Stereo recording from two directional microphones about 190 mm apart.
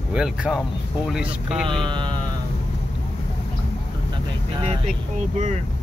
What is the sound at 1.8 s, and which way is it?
Speech, 25° right (ahead or behind).